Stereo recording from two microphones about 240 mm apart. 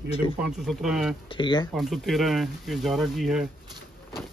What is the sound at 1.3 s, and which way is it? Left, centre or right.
Speech, centre.